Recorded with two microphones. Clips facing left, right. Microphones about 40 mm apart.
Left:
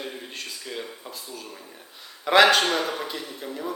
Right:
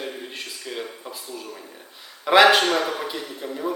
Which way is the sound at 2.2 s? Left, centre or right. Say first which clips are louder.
Right 2 dB; centre.